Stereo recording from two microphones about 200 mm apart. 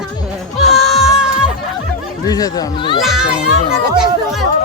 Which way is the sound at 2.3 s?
20° left (ahead or behind).